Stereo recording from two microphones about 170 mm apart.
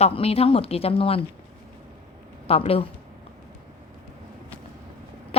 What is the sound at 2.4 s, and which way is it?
Speech, 35° left (ahead or behind).